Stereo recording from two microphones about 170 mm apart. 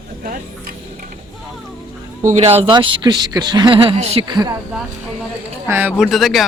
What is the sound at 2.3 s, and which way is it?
Speech, 35° right (ahead or behind).